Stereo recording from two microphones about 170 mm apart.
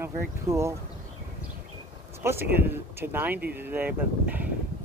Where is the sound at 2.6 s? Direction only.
15° right (ahead or behind).